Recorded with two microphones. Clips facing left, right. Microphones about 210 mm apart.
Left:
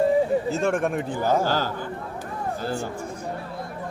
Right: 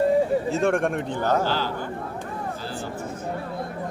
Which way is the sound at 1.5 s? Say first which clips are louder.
Left 1 dB; 45° left (ahead or behind).